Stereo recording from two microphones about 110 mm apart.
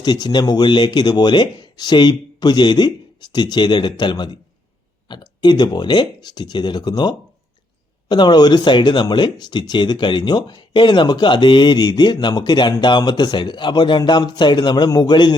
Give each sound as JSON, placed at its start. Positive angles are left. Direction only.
{"t": 0.0, "sound": "speech", "side_deg": 40}